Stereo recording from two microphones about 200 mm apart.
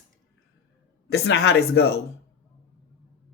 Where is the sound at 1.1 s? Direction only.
55° left (ahead or behind).